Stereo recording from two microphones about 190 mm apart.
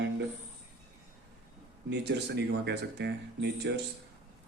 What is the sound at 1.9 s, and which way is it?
A man's voice, 60° right (ahead or behind).